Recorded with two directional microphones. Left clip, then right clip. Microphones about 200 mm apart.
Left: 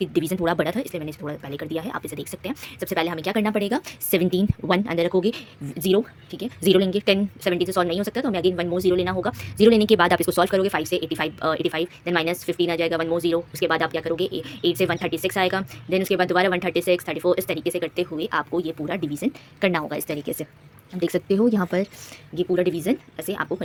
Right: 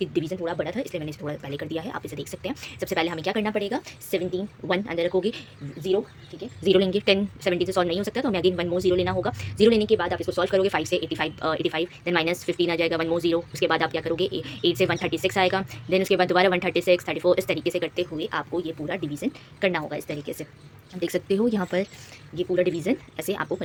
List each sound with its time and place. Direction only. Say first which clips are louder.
0.0 s speech: left 4 dB; 20° left (ahead or behind)
0.8 s speech: left 1 dB; 10° left (ahead or behind); by 4.4 s 35° left (ahead or behind)
4.7 s speech: left 2 dB; 25° left (ahead or behind)
5.8 s speech: left 4 dB; 40° left (ahead or behind)
6.7 s speech: right 2 dB; 5° left (ahead or behind)
9.8 s speech: left 5 dB; 30° left (ahead or behind)
10.4 s speech: left 1 dB; 10° left (ahead or behind)
17.9 s speech: left 3 dB; 15° left (ahead or behind)